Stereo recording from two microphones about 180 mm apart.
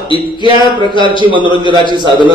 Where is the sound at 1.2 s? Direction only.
25° right (ahead or behind).